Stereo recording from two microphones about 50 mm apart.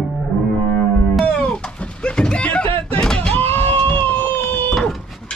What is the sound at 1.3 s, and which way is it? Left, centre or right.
Music, left.